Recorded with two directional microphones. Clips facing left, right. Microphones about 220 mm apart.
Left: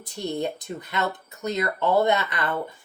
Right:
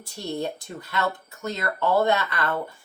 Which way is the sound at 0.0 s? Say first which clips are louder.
Left 2 dB; 20° left (ahead or behind).